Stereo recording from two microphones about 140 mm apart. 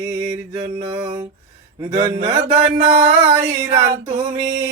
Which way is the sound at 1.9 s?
25° right (ahead or behind).